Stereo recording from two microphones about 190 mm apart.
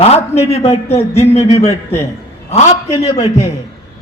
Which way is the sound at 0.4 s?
35° left (ahead or behind).